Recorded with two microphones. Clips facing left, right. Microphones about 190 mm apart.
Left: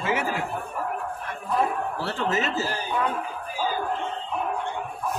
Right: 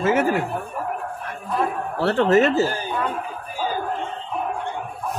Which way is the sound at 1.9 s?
60° right (ahead or behind).